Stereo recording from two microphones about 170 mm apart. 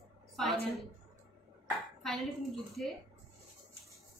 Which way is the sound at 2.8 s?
Centre (ahead or behind).